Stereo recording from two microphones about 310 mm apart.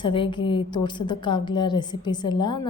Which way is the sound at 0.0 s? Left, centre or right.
Centre.